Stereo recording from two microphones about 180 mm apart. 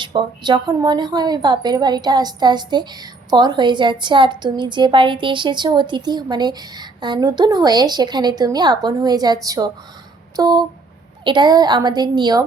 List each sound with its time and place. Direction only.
0.0 s a woman's voice: 30° right (ahead or behind)
10.3 s a sound: 20° right (ahead or behind)
11.2 s a woman's voice: 25° right (ahead or behind)